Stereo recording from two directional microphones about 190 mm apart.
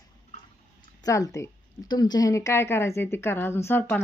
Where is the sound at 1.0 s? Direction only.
15° left (ahead or behind).